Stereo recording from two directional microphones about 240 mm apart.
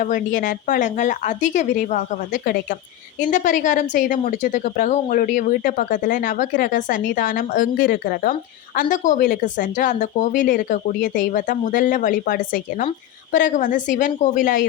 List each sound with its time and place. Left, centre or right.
0.0 s a woman's voice: left